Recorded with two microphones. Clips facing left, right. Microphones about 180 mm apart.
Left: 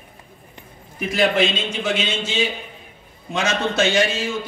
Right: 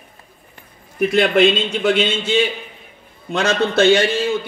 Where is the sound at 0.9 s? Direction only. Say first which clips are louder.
Right 4 dB; 60° right (ahead or behind).